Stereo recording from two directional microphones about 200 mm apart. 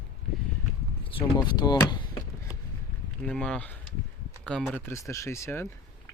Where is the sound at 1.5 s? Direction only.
20° left (ahead or behind).